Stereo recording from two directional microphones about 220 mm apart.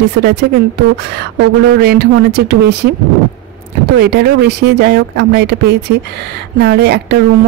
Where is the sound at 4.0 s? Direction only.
50° right (ahead or behind).